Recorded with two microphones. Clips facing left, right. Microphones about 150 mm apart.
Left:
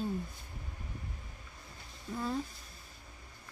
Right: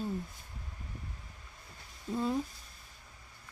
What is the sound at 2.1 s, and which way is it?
Speech, 20° right (ahead or behind).